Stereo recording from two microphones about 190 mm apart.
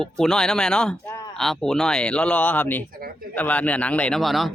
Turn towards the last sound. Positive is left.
turn(degrees=0)  # may be behind; listen again after turning